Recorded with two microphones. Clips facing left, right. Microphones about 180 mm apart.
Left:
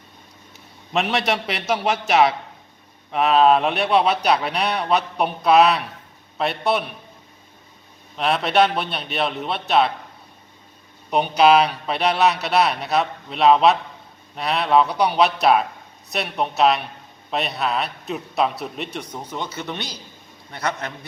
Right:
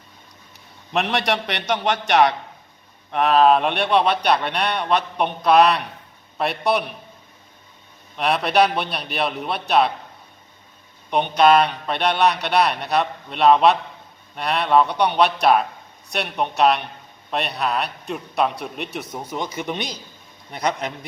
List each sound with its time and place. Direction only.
0.5 s a man's voice: centre (ahead or behind)
8.1 s speech: centre (ahead or behind)
11.1 s a man's voice: 5° left (ahead or behind); by 20.9 s 15° right (ahead or behind)